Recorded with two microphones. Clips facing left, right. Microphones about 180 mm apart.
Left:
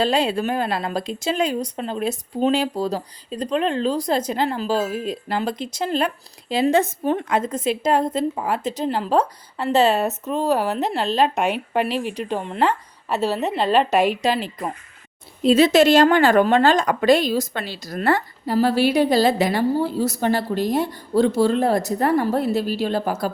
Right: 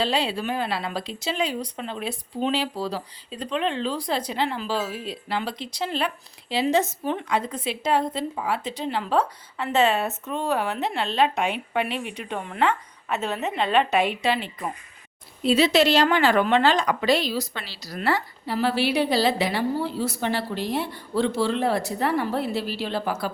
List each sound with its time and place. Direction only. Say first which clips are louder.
0.0 s a woman's voice: left 5 dB; 45° left (ahead or behind)